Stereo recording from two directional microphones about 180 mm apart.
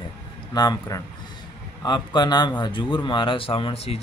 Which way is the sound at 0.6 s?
20° left (ahead or behind).